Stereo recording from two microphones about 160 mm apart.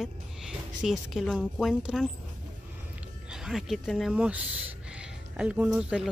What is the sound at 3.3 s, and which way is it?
Speech, 5° right (ahead or behind).